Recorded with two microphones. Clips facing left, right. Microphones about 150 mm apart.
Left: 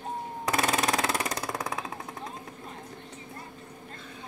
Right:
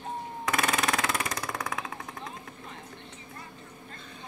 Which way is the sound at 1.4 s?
20° left (ahead or behind).